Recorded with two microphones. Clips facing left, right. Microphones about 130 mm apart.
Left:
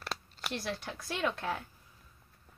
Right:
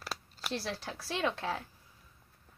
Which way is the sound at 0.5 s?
35° right (ahead or behind).